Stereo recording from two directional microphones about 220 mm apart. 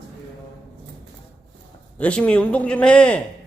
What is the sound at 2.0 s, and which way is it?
A man's voice, 5° left (ahead or behind).